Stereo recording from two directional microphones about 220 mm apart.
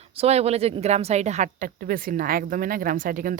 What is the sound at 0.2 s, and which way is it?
A woman's voice, 30° right (ahead or behind).